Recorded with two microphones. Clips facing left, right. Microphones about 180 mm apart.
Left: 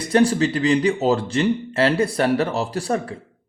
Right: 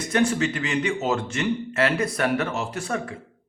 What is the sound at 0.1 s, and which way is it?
A man's voice, 35° left (ahead or behind).